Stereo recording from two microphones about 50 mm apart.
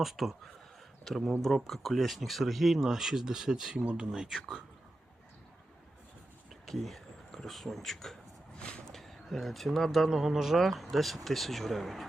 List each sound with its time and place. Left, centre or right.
0.0 s speech: centre
3.8 s speech: right
4.1 s speech: centre
6.5 s a sound: centre
8.5 s a sound: centre
8.9 s speech: centre
10.1 s speech: centre